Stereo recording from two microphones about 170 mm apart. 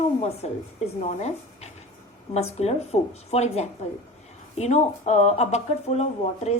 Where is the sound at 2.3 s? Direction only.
40° left (ahead or behind).